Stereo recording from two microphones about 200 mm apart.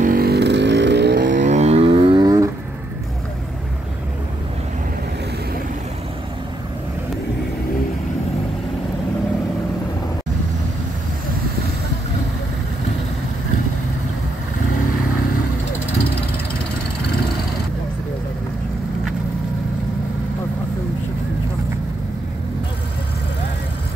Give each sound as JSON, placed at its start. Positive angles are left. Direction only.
{"t": 0.0, "sound": "vehicle", "side_deg": -45}